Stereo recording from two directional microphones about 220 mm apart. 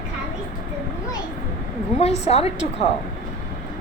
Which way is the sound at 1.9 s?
30° left (ahead or behind).